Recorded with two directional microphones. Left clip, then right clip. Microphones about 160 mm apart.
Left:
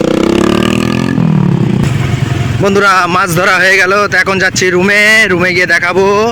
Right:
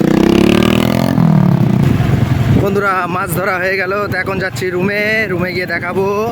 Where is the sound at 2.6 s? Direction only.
30° left (ahead or behind).